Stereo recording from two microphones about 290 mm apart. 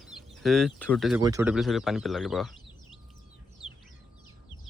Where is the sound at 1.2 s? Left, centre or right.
Centre.